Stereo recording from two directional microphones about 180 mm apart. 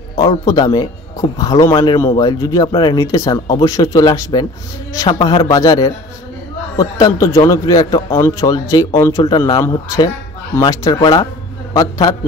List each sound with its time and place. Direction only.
0.2 s speech: 20° left (ahead or behind)